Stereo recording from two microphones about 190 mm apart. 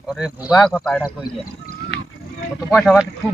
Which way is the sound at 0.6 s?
5° left (ahead or behind).